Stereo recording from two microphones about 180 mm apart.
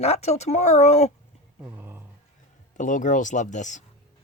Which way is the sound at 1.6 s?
10° right (ahead or behind).